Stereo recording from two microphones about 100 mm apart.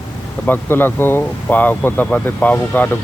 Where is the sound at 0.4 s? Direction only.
20° left (ahead or behind).